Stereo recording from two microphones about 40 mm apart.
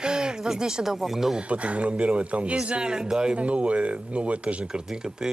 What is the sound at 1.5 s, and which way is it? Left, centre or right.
A man's voice, right.